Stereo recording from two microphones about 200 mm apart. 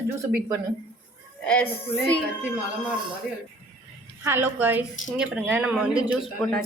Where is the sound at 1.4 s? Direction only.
5° left (ahead or behind).